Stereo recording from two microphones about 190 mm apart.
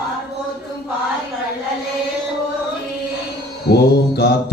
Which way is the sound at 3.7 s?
60° left (ahead or behind).